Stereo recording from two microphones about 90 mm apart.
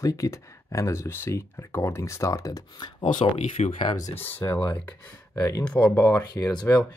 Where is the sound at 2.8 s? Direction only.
60° left (ahead or behind).